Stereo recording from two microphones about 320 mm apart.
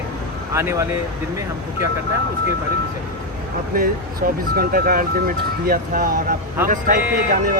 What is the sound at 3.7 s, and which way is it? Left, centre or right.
Speech, right.